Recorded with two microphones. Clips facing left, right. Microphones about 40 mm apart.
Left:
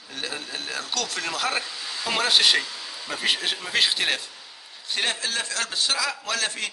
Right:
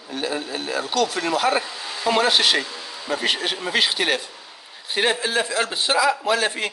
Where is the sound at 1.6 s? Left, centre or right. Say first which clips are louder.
Right 4 dB; right.